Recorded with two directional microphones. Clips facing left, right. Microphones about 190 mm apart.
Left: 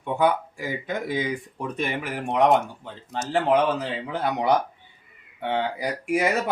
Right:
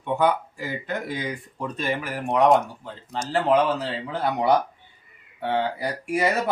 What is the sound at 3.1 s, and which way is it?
Speech, 20° left (ahead or behind).